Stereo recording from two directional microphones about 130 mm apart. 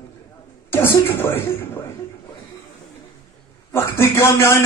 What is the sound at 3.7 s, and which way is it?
Speech, 20° left (ahead or behind).